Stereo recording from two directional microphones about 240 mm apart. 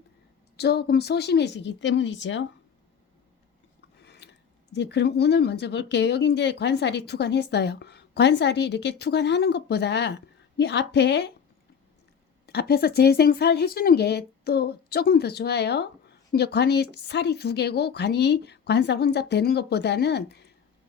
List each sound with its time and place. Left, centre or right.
0.5 s speech: left
4.0 s speech: left
12.5 s speech: left